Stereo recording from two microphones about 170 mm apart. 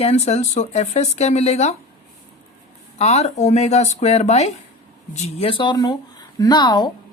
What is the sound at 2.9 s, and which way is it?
A woman's voice, 40° left (ahead or behind).